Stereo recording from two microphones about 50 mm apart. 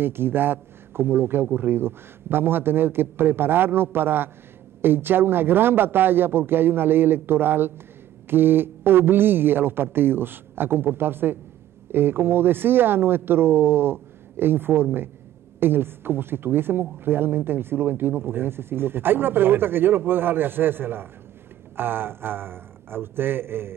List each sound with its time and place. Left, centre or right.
0.0 s a man's voice: right